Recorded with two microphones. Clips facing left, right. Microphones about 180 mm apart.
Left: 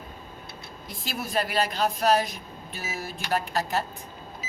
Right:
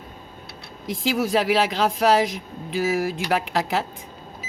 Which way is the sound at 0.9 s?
90° right.